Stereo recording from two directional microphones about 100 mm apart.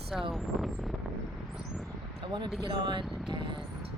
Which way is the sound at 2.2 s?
50° right (ahead or behind).